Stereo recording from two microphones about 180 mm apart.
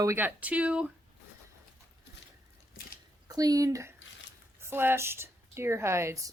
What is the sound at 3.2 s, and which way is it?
Speech, 20° right (ahead or behind).